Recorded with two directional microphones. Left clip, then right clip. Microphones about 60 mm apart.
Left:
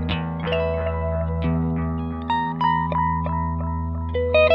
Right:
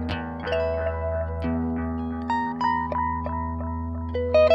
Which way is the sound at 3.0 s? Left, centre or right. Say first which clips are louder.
Left 4 dB; right.